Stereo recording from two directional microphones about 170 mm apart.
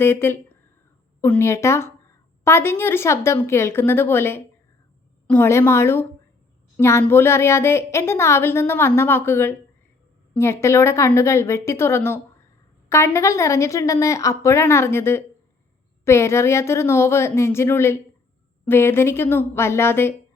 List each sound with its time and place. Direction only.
0.0 s a woman's voice: 15° left (ahead or behind)